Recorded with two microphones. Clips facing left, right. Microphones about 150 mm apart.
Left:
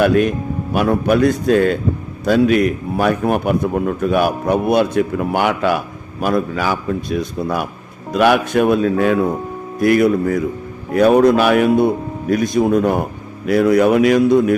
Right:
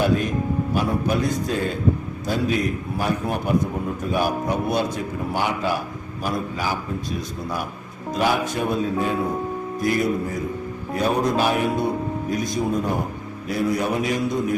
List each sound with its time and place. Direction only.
0.0 s a man's voice: 70° left (ahead or behind)